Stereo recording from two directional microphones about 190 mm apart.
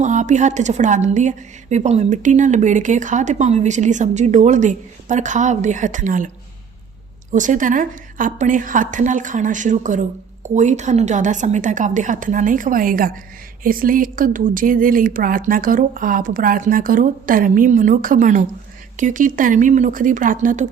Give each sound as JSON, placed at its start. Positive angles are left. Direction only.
{"t": 0.0, "sound": "a woman's voice", "side_deg": -40}